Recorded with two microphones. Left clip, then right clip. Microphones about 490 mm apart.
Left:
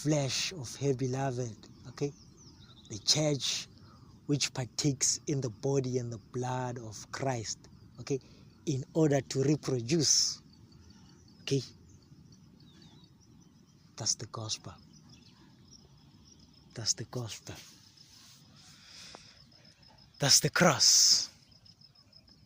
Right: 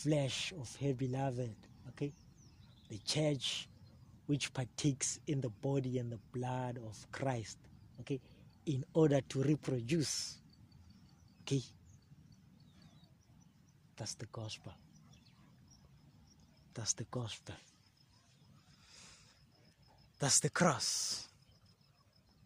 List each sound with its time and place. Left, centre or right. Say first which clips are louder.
0.0 s speech: left 5 dB; right
8.6 s speech: left 3 dB; right
11.4 s speech: left 7 dB; right
13.9 s speech: left 12 dB; right
16.7 s speech: left 6 dB; right
20.1 s speech: left 8 dB; right